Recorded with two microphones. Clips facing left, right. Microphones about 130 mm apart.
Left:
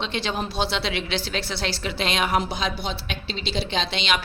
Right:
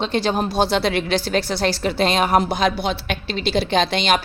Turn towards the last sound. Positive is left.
turn(degrees=-45)  # may be behind; listen again after turning